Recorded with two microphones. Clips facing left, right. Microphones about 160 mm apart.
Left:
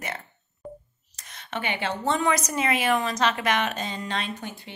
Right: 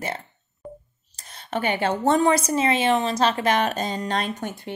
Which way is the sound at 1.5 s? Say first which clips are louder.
Right 6 dB; 45° right (ahead or behind).